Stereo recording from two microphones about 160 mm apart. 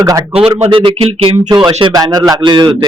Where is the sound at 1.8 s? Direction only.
25° right (ahead or behind).